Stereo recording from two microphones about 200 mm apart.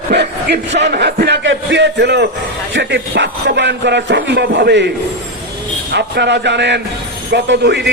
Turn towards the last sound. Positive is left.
turn(degrees=-60)  # may be behind; listen again after turning